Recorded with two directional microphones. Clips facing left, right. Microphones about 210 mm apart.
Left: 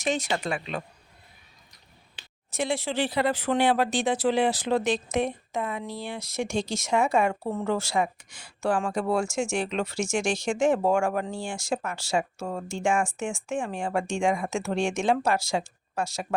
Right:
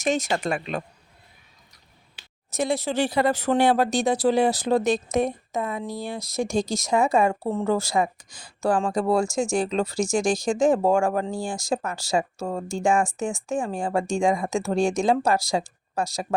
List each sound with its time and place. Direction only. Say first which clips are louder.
0.0 s speech: right 3 dB; 45° right (ahead or behind)
2.5 s speech: right 3 dB; 40° right (ahead or behind)